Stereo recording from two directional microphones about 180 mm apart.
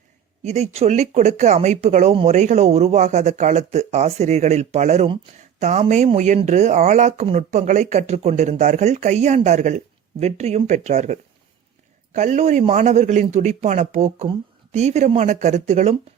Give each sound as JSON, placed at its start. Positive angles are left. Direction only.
{"t": 0.4, "sound": "speech", "side_deg": -35}